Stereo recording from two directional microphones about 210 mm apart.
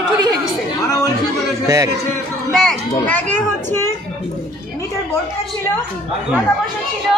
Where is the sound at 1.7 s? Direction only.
15° right (ahead or behind).